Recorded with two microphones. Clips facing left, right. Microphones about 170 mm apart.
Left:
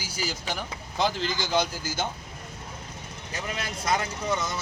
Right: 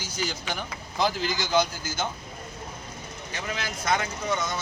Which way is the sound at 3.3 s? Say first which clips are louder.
Even; 30° left (ahead or behind).